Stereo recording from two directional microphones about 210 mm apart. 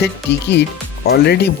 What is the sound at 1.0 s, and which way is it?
Speech, 50° left (ahead or behind).